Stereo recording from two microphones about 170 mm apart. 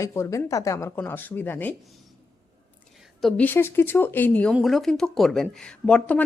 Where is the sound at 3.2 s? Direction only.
5° left (ahead or behind).